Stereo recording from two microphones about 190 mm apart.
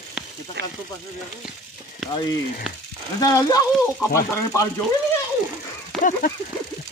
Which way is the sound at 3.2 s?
20° left (ahead or behind).